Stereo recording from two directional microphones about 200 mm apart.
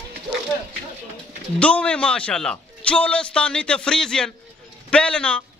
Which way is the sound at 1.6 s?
5° left (ahead or behind).